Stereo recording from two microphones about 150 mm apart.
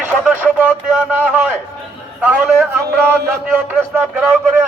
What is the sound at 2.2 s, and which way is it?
Speech, 10° right (ahead or behind).